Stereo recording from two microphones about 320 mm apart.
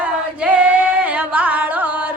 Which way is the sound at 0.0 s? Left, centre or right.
Centre.